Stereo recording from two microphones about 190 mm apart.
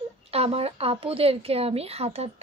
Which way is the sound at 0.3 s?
30° right (ahead or behind).